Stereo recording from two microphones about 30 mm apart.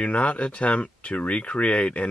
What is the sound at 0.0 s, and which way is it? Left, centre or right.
Speech, left.